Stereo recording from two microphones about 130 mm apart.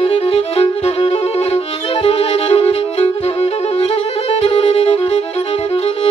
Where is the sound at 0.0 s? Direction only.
50° left (ahead or behind).